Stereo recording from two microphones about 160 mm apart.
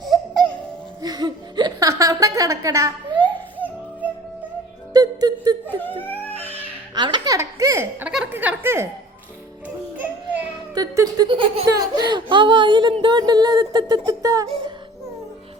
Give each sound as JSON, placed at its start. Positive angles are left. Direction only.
{"t": 0.0, "sound": "music", "side_deg": 0}
{"t": 1.0, "sound": "a woman's voice", "side_deg": -25}
{"t": 4.0, "sound": "music", "side_deg": -10}
{"t": 4.9, "sound": "music", "side_deg": -25}
{"t": 6.0, "sound": "baby cry", "side_deg": 10}
{"t": 6.9, "sound": "baby laughter", "side_deg": -30}
{"t": 7.3, "sound": "a woman's voice", "side_deg": -20}
{"t": 9.6, "sound": "music", "side_deg": -10}
{"t": 10.8, "sound": "speech", "side_deg": -25}